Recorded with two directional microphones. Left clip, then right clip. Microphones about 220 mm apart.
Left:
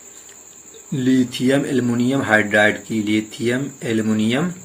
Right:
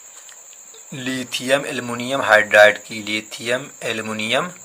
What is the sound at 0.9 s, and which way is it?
Speech, 35° right (ahead or behind).